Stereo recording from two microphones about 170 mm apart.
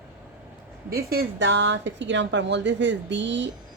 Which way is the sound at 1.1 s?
90° right.